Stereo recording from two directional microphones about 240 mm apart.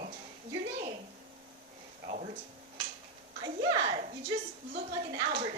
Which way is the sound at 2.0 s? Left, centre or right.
Right.